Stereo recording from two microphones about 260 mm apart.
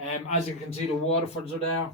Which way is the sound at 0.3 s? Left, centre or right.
Left.